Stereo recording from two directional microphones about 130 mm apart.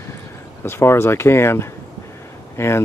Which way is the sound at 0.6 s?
20° left (ahead or behind).